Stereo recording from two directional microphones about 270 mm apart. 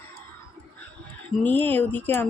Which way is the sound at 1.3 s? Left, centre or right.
Centre.